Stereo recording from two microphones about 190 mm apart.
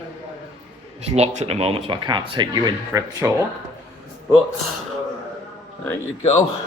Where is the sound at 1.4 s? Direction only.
35° right (ahead or behind); by 3.3 s 15° right (ahead or behind).